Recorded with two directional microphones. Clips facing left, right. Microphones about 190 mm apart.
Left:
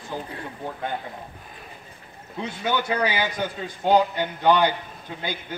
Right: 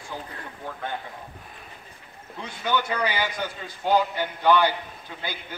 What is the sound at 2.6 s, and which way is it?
A man's voice, 15° left (ahead or behind).